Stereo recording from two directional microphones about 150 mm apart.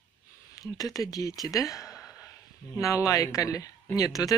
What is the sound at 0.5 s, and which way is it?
Speech, 25° left (ahead or behind).